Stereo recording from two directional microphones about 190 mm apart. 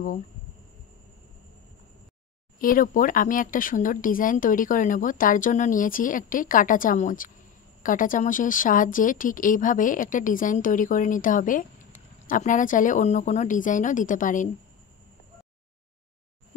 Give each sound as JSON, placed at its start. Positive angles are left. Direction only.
{"t": 2.6, "sound": "speech", "side_deg": 45}